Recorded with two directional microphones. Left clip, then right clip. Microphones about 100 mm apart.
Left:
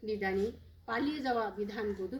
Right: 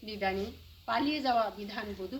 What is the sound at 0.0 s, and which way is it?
A woman's voice, 25° right (ahead or behind).